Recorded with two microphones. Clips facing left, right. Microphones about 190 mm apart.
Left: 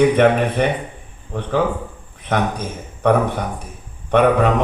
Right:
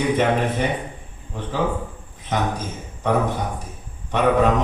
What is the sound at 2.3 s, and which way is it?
Speech, 65° left (ahead or behind).